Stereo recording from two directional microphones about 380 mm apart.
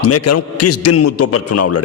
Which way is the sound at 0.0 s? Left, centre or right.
Left.